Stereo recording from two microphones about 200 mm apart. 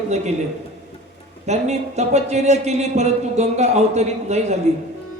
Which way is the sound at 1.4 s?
35° right (ahead or behind).